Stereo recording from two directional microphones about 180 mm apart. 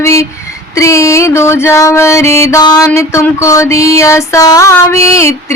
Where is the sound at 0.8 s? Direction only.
15° left (ahead or behind).